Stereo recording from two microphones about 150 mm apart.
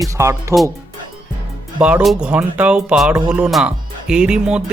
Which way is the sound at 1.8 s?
5° right (ahead or behind).